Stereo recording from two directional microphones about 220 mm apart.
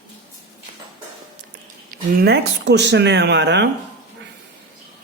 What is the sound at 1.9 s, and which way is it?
Speech, 50° right (ahead or behind).